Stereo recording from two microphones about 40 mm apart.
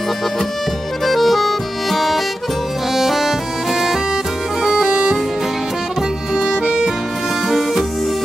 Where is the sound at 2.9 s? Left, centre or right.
Centre.